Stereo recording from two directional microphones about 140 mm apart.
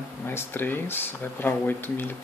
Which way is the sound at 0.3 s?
15° left (ahead or behind).